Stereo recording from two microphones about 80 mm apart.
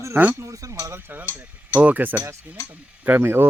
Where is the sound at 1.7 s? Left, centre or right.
Right.